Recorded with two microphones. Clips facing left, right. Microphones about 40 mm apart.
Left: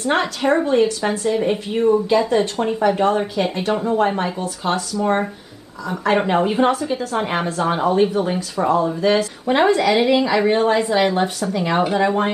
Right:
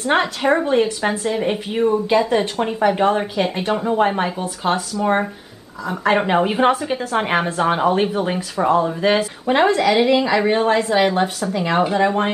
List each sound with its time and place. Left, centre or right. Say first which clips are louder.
0.0 s a woman's voice: right 1 dB; centre
9.5 s speech: even; centre